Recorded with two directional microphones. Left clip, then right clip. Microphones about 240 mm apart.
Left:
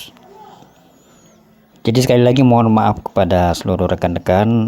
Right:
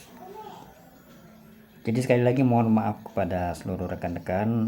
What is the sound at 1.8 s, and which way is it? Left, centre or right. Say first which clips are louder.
Speech: left 10 dB; left.